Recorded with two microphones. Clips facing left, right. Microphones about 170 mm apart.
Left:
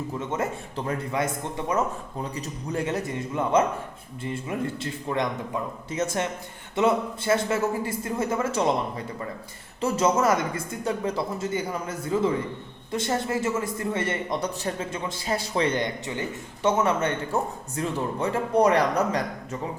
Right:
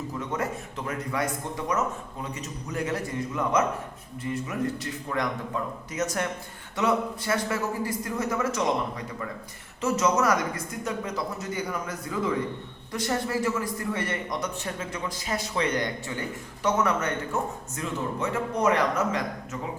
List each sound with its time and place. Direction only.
0.2 s a man's voice: 25° left (ahead or behind)